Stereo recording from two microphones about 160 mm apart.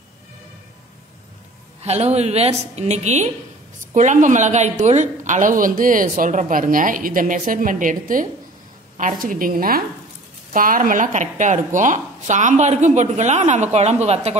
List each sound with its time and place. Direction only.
1.8 s a woman's voice: 45° right (ahead or behind)